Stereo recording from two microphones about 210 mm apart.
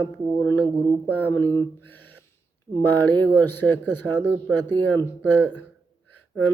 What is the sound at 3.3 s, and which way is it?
Speech, 10° left (ahead or behind).